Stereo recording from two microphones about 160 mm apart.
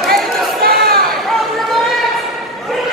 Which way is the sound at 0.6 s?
70° right (ahead or behind).